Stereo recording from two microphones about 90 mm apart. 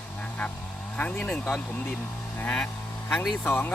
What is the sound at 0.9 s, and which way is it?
Speech, 15° left (ahead or behind).